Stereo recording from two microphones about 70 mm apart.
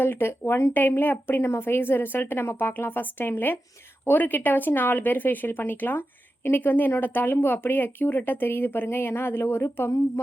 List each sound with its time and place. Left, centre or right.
0.0 s speech: left